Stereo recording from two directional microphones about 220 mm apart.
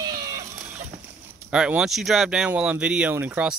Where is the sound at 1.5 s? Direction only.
5° right (ahead or behind).